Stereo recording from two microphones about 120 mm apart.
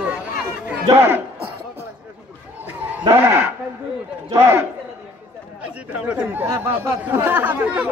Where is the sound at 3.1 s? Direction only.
20° right (ahead or behind).